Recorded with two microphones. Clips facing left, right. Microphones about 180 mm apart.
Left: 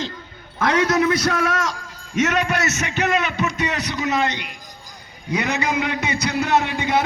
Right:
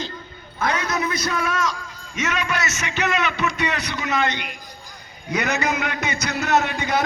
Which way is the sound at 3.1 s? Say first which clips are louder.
Even; 45° left (ahead or behind).